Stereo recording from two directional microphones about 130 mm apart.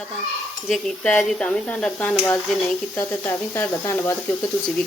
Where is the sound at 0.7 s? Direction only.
5° left (ahead or behind).